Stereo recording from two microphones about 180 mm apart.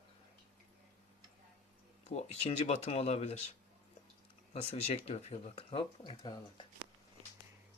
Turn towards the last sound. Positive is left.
turn(degrees=25)  # may be behind; listen again after turning